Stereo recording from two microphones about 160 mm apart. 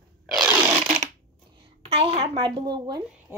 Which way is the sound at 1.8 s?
40° right (ahead or behind).